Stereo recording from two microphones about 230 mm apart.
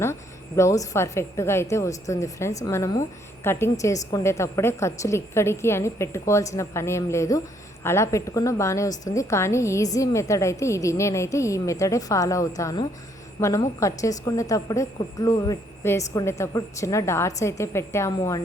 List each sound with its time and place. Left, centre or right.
0.0 s a woman's voice: centre